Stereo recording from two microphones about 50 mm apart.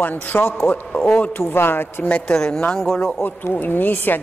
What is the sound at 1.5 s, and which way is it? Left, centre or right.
Speech, left.